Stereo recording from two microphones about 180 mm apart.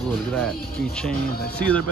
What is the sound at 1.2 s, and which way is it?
Speech, 55° left (ahead or behind).